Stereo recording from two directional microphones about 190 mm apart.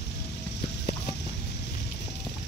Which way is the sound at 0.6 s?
60° left (ahead or behind).